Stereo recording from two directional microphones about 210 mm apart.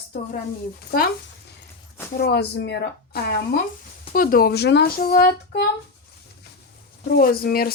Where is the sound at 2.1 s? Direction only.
50° left (ahead or behind).